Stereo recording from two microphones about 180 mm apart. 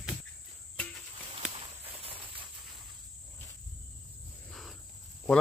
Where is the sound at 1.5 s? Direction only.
30° right (ahead or behind).